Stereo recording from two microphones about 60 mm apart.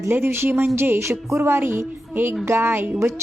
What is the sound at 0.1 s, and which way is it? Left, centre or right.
A woman's voice, right.